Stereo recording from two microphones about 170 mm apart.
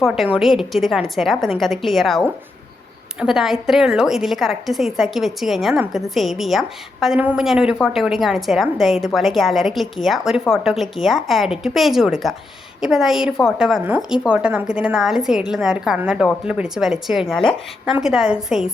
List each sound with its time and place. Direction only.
0.0 s a woman's voice: 5° right (ahead or behind)